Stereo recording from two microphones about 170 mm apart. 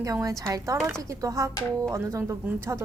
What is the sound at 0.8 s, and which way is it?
Speech, 5° right (ahead or behind).